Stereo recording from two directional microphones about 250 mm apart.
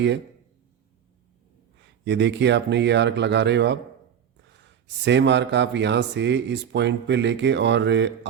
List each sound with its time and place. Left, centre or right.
2.0 s speech: right